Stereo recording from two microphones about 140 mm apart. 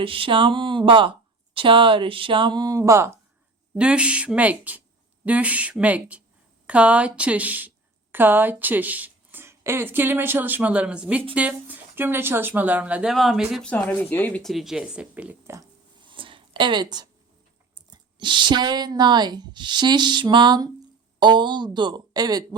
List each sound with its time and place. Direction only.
0.0 s speech: 40° right (ahead or behind); by 3.1 s 20° right (ahead or behind)
3.8 s speech: 10° right (ahead or behind)
13.7 s speech: 10° left (ahead or behind)
14.4 s speech: centre (ahead or behind)
16.0 s a sound: 35° right (ahead or behind)
17.9 s speech: 35° right (ahead or behind)